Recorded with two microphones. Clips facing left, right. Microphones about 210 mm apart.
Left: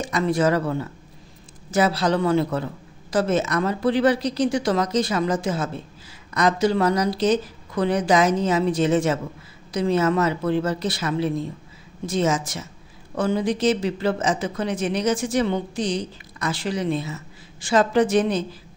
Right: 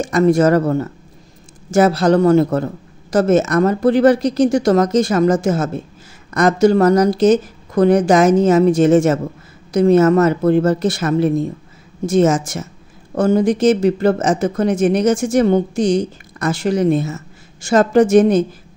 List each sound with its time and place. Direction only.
0.0 s speech: 45° right (ahead or behind)